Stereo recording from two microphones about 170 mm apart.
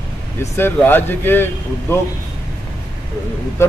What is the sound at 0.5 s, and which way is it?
A man's voice, 10° left (ahead or behind).